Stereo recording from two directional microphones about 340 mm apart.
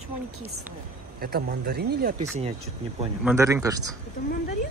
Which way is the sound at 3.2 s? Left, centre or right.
Centre.